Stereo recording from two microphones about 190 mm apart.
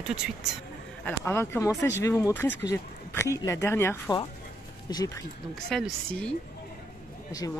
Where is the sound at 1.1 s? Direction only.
10° left (ahead or behind).